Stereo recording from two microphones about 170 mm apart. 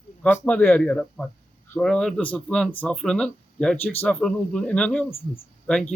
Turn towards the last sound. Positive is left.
turn(degrees=5)  # may be behind; listen again after turning